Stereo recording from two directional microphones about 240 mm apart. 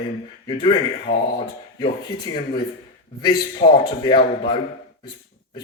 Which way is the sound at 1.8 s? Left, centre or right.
Centre.